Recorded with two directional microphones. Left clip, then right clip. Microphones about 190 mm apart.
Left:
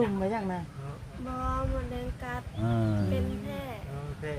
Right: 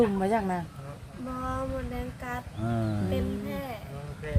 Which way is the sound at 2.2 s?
Centre (ahead or behind).